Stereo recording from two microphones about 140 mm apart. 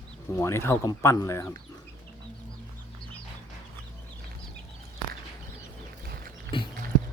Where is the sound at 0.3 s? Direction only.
20° left (ahead or behind).